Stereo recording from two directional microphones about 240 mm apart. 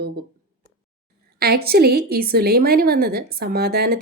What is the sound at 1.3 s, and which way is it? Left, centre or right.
Speech, right.